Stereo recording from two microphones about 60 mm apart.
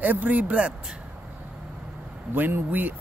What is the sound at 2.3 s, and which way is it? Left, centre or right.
Speech, right.